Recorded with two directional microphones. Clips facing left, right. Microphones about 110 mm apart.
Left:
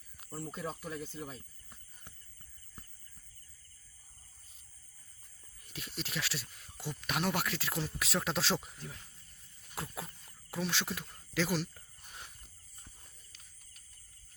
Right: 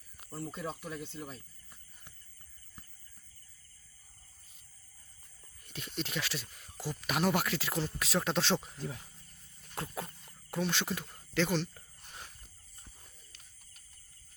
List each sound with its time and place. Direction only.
0.2 s speech: centre (ahead or behind)
5.6 s speech: centre (ahead or behind)
9.6 s a sound: centre (ahead or behind)